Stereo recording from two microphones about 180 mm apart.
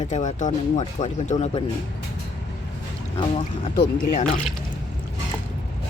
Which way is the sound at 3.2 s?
30° left (ahead or behind).